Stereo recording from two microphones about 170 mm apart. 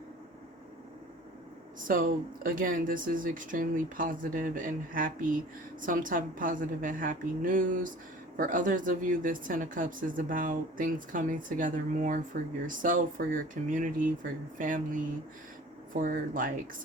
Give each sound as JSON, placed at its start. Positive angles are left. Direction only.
{"t": 1.9, "sound": "speech", "side_deg": -55}